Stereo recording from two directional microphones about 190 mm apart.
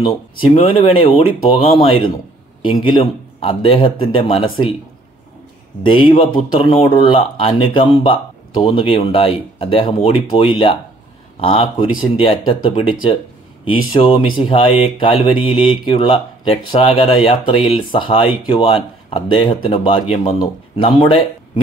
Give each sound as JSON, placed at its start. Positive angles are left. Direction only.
{"t": 0.0, "sound": "speech", "side_deg": 30}
{"t": 5.9, "sound": "speech", "side_deg": 25}
{"t": 13.9, "sound": "speech", "side_deg": 25}